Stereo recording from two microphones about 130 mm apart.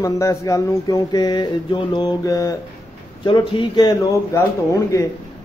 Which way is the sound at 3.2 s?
40° left (ahead or behind).